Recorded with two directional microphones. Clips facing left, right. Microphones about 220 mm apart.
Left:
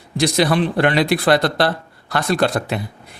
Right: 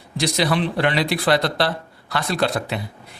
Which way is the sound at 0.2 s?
50° left (ahead or behind).